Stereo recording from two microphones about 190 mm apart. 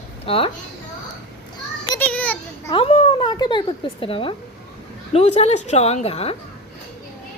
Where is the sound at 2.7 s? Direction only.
30° left (ahead or behind).